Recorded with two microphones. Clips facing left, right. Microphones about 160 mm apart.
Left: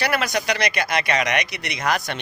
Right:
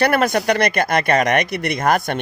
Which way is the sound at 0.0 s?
55° right (ahead or behind).